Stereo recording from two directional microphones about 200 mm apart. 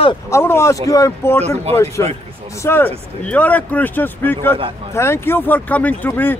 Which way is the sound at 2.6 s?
10° left (ahead or behind).